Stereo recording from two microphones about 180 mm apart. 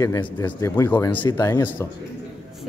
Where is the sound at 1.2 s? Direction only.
20° left (ahead or behind).